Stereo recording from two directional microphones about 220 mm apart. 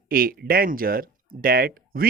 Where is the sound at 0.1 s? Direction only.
40° right (ahead or behind).